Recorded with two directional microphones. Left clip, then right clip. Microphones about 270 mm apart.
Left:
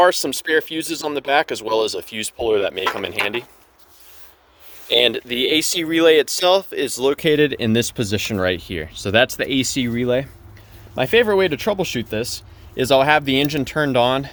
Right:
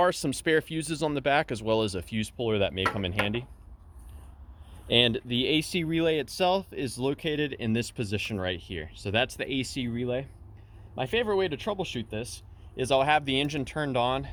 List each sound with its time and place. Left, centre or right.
0.0 s speech: centre
4.9 s speech: left